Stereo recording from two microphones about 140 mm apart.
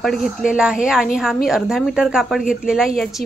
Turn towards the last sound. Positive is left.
turn(degrees=-5)  # may be behind; listen again after turning